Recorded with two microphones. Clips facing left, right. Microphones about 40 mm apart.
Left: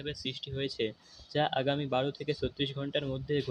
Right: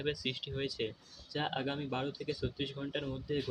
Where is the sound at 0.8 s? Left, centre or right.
Left.